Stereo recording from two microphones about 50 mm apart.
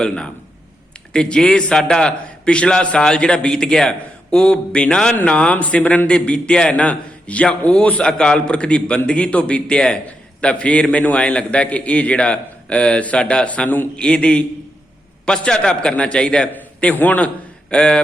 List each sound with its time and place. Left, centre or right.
1.1 s a man's voice: centre; by 13.8 s left
13.9 s a man's voice: centre
16.9 s a man's voice: left; by 18.0 s centre